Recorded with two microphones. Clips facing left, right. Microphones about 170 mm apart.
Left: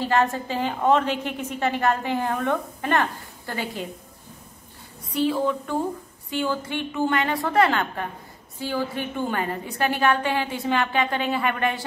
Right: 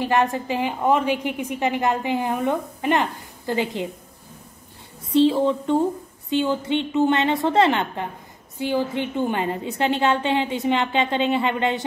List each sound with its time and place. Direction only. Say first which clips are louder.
0.0 s a woman's voice: right 1 dB; 15° right (ahead or behind)
5.1 s a woman's voice: right 5 dB; 25° right (ahead or behind)